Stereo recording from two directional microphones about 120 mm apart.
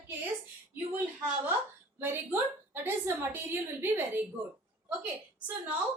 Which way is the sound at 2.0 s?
20° right (ahead or behind).